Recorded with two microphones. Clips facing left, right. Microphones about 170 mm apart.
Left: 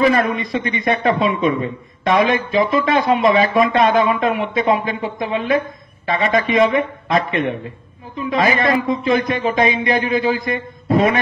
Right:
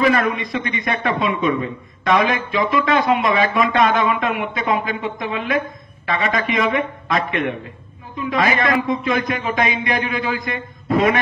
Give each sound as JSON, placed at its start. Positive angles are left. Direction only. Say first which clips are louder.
{"t": 0.0, "sound": "a man's voice", "louder": "left 2 dB", "side_deg": 30}